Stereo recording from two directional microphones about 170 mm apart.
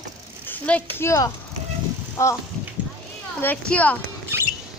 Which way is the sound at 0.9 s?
15° left (ahead or behind).